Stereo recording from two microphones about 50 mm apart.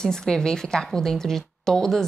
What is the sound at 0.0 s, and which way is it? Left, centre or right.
A woman's voice, centre.